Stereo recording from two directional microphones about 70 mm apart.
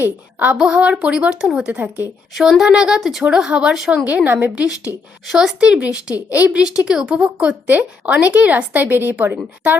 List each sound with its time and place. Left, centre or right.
0.0 s a woman's voice: right
2.3 s speech: centre
4.0 s a woman's voice: right
5.3 s speech: centre; by 6.6 s right
6.8 s a woman's voice: centre